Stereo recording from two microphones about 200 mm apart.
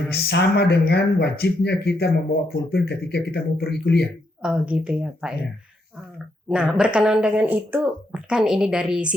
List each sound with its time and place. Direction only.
0.1 s speech: 55° left (ahead or behind)
4.4 s speech: 5° right (ahead or behind)
6.5 s speech: 5° right (ahead or behind)